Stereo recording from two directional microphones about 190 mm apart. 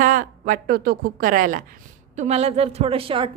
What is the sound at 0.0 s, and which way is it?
A woman's voice, 45° right (ahead or behind).